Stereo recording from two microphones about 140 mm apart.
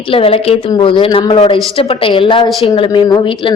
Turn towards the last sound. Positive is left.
turn(degrees=35)  # may be behind; listen again after turning